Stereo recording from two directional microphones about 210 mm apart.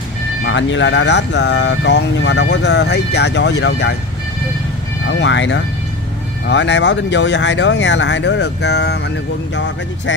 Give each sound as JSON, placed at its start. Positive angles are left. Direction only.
{"t": 0.5, "sound": "speech", "side_deg": 60}
{"t": 5.0, "sound": "speech", "side_deg": 60}